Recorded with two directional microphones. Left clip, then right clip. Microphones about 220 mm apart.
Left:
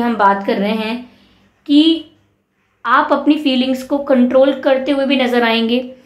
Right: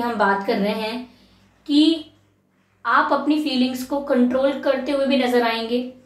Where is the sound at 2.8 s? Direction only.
45° left (ahead or behind).